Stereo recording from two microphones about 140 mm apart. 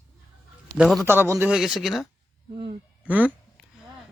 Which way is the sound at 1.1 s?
15° right (ahead or behind).